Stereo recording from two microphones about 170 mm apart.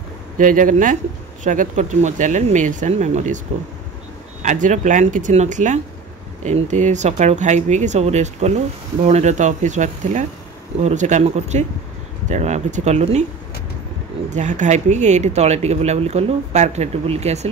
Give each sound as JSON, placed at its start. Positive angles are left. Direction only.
{"t": 0.4, "sound": "speech", "side_deg": -50}
{"t": 4.4, "sound": "speech", "side_deg": -45}
{"t": 14.3, "sound": "speech", "side_deg": -45}